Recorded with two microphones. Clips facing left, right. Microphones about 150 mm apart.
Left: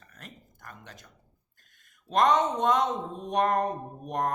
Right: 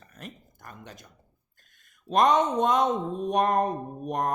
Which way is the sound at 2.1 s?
15° right (ahead or behind).